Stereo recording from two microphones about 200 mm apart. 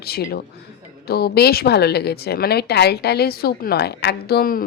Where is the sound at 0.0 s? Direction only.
50° left (ahead or behind).